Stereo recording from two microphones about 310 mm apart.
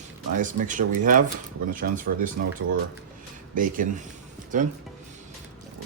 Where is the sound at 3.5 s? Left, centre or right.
Right.